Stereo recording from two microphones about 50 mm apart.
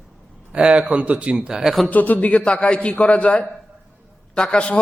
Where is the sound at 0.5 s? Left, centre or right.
Right.